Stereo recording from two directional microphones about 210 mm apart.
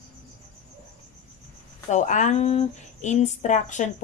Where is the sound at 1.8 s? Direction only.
35° left (ahead or behind).